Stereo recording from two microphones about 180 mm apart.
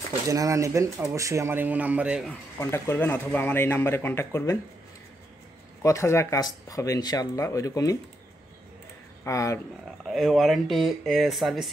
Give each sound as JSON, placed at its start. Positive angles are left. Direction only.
{"t": 0.3, "sound": "speech", "side_deg": -20}
{"t": 2.6, "sound": "speech", "side_deg": 15}
{"t": 5.8, "sound": "speech", "side_deg": 15}
{"t": 9.2, "sound": "speech", "side_deg": 15}
{"t": 10.0, "sound": "speech", "side_deg": 0}